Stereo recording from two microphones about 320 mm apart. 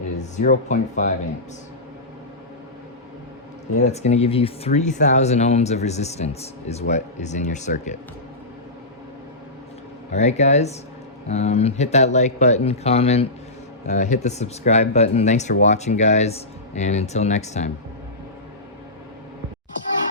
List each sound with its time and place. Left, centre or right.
0.3 s speech: left
3.8 s speech: left
10.1 s speech: left